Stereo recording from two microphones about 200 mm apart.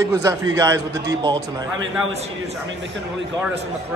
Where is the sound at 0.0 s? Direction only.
15° right (ahead or behind).